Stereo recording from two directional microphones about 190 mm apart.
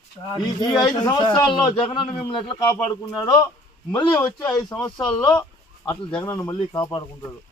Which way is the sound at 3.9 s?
20° left (ahead or behind).